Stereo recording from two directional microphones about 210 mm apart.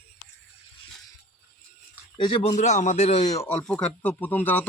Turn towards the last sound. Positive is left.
turn(degrees=10)  # may be behind; listen again after turning